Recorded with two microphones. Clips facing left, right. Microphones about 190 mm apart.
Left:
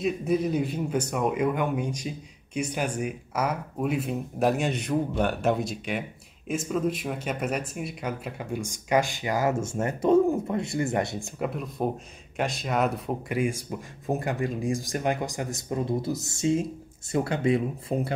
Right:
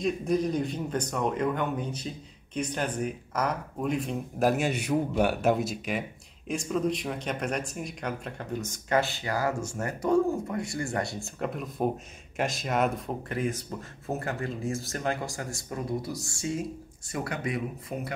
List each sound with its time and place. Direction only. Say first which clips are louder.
0.0 s speech: left 1 dB; 5° left (ahead or behind)
11.3 s speech: left 1 dB; 5° left (ahead or behind); by 18.1 s 30° left (ahead or behind)